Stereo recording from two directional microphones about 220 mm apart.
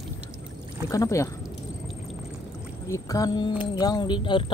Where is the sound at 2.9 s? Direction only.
15° left (ahead or behind).